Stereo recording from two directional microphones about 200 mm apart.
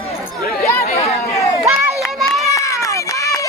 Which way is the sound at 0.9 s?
15° left (ahead or behind).